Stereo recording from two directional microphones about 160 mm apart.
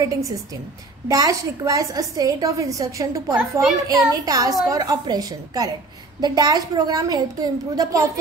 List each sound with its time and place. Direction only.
0.0 s a woman's voice: 20° right (ahead or behind)